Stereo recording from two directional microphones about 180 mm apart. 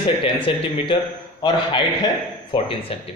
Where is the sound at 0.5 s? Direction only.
30° left (ahead or behind).